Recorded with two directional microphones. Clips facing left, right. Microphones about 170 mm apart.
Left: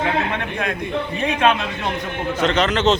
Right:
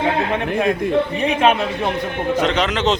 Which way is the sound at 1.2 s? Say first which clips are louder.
Even; 20° right (ahead or behind).